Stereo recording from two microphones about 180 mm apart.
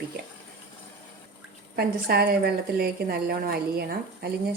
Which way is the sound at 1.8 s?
60° right (ahead or behind).